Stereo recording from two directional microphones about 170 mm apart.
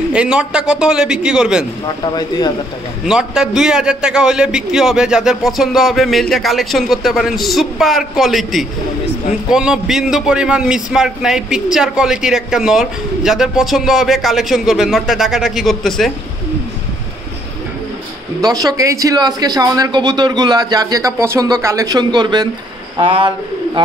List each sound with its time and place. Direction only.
0.1 s a man's voice: 5° right (ahead or behind)
1.9 s speech: 25° left (ahead or behind)
3.1 s a man's voice: 5° right (ahead or behind)
18.4 s a man's voice: 20° right (ahead or behind)